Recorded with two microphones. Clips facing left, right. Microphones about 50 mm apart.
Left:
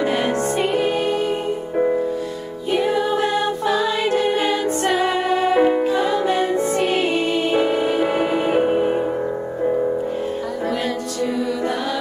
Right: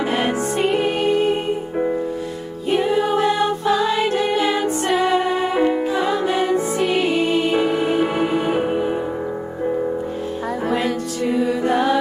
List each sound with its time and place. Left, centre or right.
2.7 s music: right
4.8 s music: centre
5.9 s music: centre
7.1 s music: centre
7.7 s music: centre
8.5 s music: centre
11.3 s music: right